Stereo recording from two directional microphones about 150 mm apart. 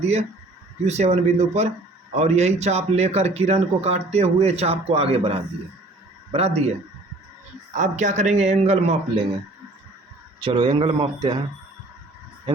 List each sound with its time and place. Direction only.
0.0 s speech: 45° right (ahead or behind)
7.8 s speech: 55° right (ahead or behind)
10.4 s speech: 30° right (ahead or behind)